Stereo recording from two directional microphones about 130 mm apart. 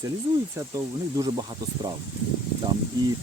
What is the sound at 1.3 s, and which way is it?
Speech, 35° right (ahead or behind).